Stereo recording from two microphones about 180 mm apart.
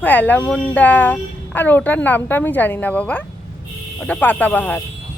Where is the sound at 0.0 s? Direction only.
10° left (ahead or behind).